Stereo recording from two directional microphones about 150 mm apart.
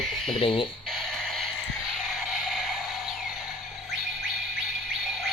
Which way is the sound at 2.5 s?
Centre (ahead or behind).